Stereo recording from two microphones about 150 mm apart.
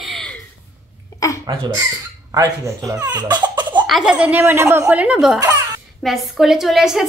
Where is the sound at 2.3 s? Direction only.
25° right (ahead or behind).